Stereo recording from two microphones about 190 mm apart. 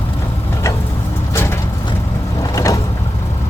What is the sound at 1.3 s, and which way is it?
Vehicle, 15° left (ahead or behind).